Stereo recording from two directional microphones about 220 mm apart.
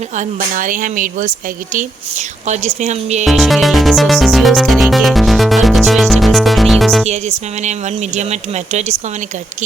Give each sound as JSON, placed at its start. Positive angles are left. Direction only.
{"t": 0.2, "sound": "speech", "side_deg": -35}
{"t": 2.5, "sound": "speech", "side_deg": -30}
{"t": 3.2, "sound": "music", "side_deg": 0}
{"t": 7.1, "sound": "speech", "side_deg": -30}